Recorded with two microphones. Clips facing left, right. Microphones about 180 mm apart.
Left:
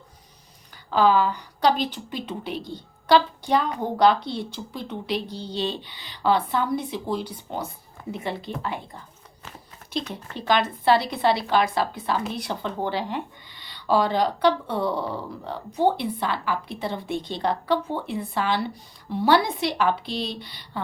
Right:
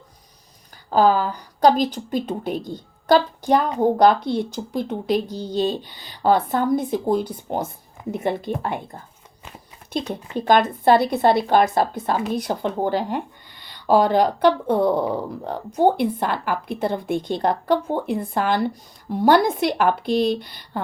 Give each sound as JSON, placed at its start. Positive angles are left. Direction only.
{"t": 0.9, "sound": "a woman's voice", "side_deg": -45}
{"t": 10.3, "sound": "a woman's voice", "side_deg": -45}